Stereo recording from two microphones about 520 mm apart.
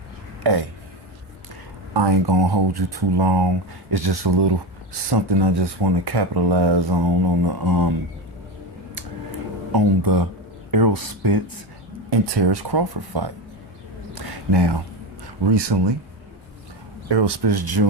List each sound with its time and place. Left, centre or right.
1.9 s speech: right
9.7 s speech: right
14.2 s a sound: right
15.4 s speech: right
17.1 s speech: right